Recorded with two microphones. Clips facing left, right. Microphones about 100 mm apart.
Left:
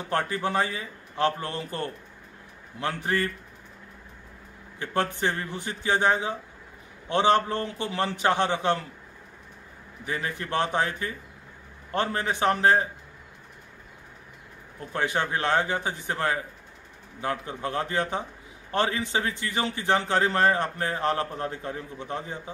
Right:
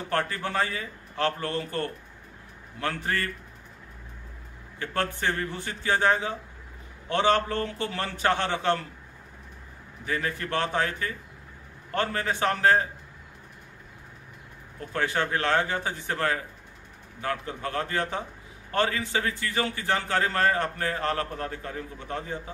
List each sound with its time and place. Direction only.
0.1 s a man's voice: 20° left (ahead or behind)
4.7 s a man's voice: 20° left (ahead or behind)
10.0 s a man's voice: 20° left (ahead or behind)
14.9 s a man's voice: 20° left (ahead or behind)